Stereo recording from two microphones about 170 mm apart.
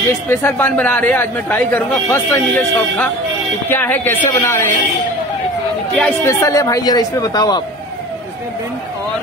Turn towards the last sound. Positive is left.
turn(degrees=25)  # may be behind; listen again after turning